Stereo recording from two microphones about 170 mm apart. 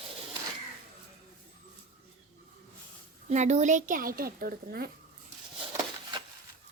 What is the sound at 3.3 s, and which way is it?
Speech, 45° right (ahead or behind).